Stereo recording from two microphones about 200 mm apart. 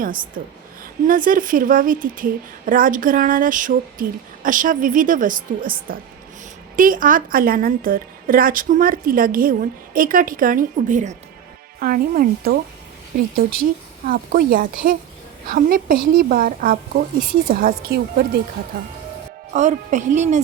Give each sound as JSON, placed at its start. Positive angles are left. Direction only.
{"t": 1.0, "sound": "a woman's voice", "side_deg": -45}
{"t": 19.5, "sound": "a woman's voice", "side_deg": -35}